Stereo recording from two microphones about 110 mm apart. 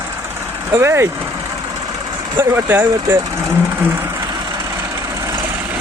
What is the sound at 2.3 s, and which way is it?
Speech, 20° right (ahead or behind).